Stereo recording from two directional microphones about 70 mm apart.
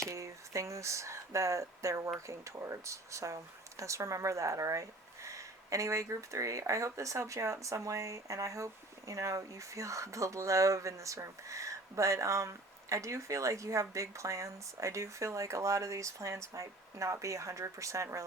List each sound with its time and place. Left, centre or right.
0.1 s speech: right